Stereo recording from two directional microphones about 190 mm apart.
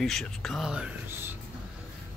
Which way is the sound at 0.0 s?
Centre (ahead or behind).